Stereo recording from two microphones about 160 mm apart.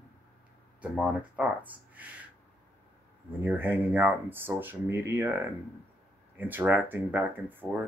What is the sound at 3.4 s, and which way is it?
Speech, 10° right (ahead or behind).